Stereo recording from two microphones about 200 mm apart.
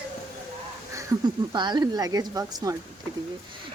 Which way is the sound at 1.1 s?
15° right (ahead or behind).